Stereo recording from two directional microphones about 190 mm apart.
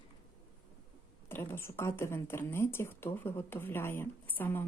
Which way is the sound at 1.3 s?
10° left (ahead or behind).